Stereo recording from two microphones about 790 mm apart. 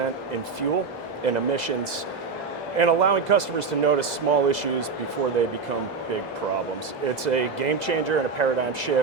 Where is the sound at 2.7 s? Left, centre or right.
Right.